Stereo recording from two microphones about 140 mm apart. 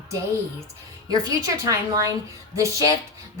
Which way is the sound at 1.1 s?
25° right (ahead or behind).